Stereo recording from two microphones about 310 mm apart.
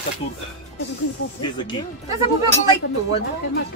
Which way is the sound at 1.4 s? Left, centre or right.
Centre.